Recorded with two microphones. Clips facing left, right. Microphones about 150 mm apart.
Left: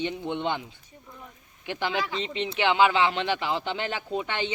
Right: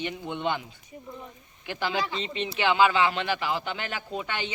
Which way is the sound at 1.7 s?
20° left (ahead or behind).